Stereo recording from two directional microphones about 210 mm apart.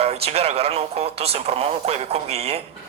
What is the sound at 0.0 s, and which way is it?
Speech, 30° right (ahead or behind).